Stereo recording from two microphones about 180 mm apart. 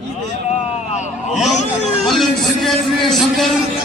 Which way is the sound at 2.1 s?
Centre (ahead or behind).